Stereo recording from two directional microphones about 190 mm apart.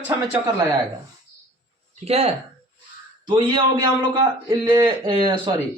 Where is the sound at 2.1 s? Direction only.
30° right (ahead or behind).